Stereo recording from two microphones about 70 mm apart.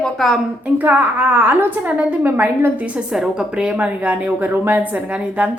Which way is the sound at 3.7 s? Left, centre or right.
Right.